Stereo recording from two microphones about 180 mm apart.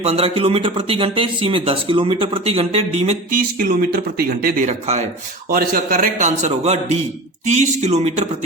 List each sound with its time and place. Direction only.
0.0 s speech: 35° right (ahead or behind)
5.5 s speech: 55° right (ahead or behind); by 8.4 s 40° right (ahead or behind)